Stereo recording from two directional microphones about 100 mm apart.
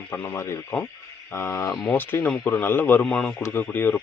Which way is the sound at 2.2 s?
10° left (ahead or behind).